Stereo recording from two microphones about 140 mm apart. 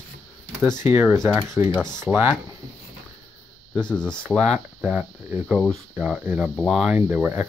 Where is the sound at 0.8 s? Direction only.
15° right (ahead or behind).